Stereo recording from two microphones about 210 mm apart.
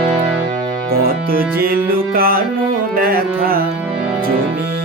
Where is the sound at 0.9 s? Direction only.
45° right (ahead or behind).